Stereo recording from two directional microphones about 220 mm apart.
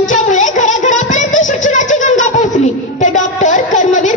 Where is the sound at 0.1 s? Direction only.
35° left (ahead or behind).